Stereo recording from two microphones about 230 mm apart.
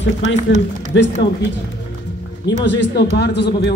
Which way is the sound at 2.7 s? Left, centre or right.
Left.